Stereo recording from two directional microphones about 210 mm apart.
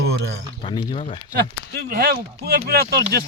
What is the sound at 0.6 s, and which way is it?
Speech, 20° left (ahead or behind).